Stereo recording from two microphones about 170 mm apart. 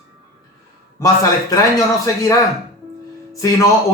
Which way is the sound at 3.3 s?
20° left (ahead or behind).